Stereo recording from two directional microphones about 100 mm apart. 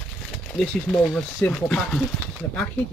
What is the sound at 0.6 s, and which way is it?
Speech, 10° left (ahead or behind).